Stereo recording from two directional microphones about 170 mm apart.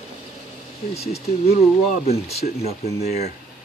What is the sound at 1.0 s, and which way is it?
Speech, 35° left (ahead or behind).